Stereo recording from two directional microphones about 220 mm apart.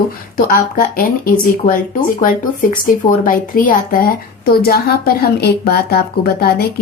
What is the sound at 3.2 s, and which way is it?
A woman's voice, 40° left (ahead or behind).